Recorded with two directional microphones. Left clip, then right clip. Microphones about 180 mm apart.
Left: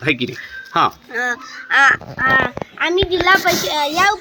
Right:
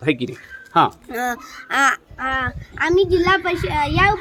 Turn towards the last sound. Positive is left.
turn(degrees=0)  # may be behind; listen again after turning